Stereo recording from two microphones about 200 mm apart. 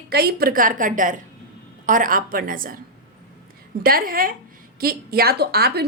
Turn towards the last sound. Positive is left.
turn(degrees=-50)  # may be behind; listen again after turning